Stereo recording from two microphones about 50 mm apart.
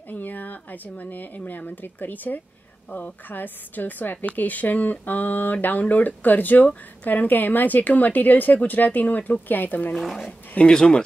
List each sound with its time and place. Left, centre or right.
0.1 s a woman's voice: left
9.9 s speech: centre
10.7 s speech: centre